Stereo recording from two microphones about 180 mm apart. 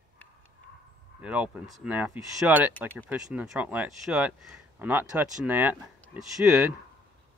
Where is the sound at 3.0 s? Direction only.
5° right (ahead or behind).